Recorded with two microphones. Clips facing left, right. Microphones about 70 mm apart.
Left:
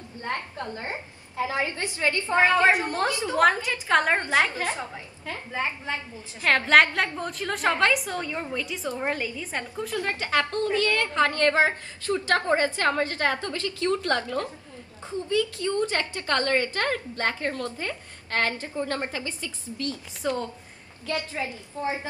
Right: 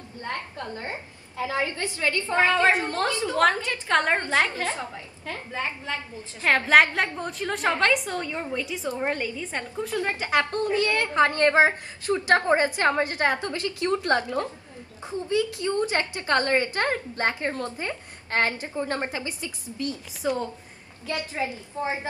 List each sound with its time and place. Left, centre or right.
1.4 s a woman's voice: left; by 4.1 s centre
4.1 s a woman's voice: centre
6.4 s a woman's voice: centre
9.6 s a woman's voice: centre
20.2 s a woman's voice: centre
21.3 s a woman's voice: right